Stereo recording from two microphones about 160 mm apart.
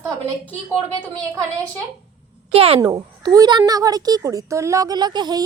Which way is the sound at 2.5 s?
35° right (ahead or behind).